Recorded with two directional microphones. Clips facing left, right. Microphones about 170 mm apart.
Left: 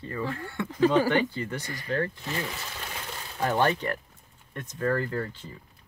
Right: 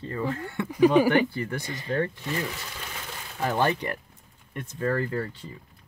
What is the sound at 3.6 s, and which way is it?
A woman's voice, 15° right (ahead or behind).